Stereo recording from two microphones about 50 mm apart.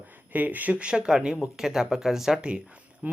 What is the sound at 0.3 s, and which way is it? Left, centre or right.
Speech, right.